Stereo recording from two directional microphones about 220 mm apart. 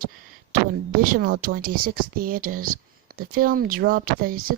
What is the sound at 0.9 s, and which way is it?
Speech, 40° right (ahead or behind).